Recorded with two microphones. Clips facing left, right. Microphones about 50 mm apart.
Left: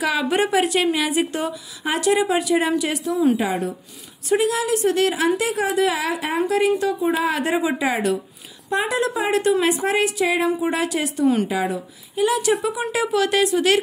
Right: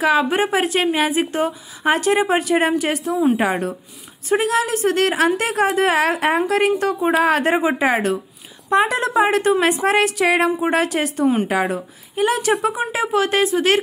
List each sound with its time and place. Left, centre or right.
0.0 s a woman's voice: right